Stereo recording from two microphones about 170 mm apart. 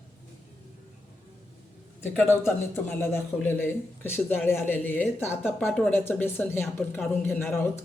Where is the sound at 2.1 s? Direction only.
15° left (ahead or behind).